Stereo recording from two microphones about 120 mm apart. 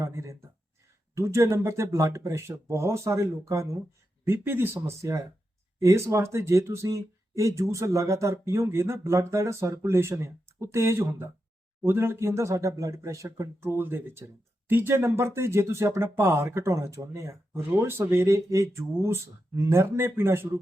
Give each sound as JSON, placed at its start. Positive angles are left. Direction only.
{"t": 0.0, "sound": "speech", "side_deg": -25}